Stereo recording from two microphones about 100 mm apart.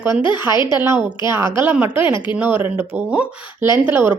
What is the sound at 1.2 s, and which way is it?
Speech, 25° right (ahead or behind).